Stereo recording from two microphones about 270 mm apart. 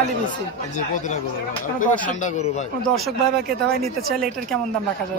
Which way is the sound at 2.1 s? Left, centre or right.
Left.